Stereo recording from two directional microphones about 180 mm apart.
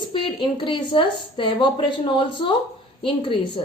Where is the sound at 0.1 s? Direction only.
25° left (ahead or behind).